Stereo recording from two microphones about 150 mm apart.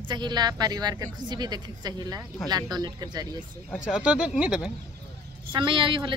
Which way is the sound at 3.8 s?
5° right (ahead or behind).